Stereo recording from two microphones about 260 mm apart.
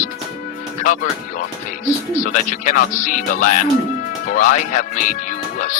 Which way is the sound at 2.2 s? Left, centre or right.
Left.